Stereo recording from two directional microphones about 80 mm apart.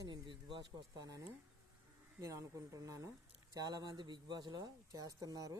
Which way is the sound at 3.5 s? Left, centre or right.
Right.